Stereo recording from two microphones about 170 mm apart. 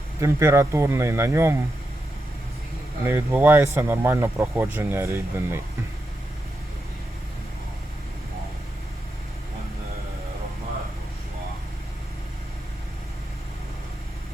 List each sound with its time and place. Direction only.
0.2 s speech: 15° right (ahead or behind)
3.1 s speech: 10° right (ahead or behind)